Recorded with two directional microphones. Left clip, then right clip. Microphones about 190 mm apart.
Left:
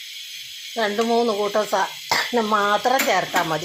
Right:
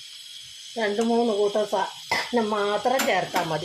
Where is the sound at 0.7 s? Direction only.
15° left (ahead or behind).